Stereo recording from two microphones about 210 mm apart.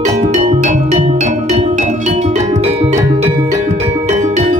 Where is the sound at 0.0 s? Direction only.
35° right (ahead or behind).